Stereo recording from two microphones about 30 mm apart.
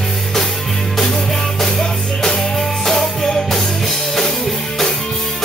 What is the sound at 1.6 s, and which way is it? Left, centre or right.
Music, centre.